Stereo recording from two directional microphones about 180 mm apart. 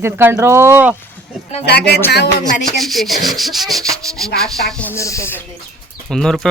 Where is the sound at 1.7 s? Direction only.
65° left (ahead or behind).